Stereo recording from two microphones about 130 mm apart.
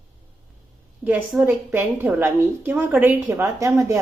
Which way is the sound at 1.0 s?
10° right (ahead or behind).